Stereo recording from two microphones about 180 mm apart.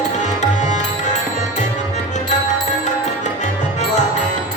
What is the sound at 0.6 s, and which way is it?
Tabla, 40° left (ahead or behind).